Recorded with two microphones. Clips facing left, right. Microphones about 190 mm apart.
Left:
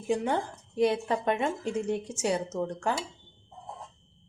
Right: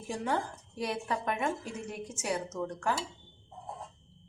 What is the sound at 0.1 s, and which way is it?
A woman's voice, 20° left (ahead or behind).